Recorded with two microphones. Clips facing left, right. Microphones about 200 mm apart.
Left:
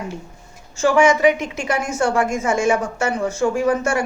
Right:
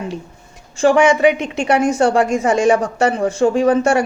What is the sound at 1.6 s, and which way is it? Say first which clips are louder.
Speech: right 7 dB; 30° right (ahead or behind).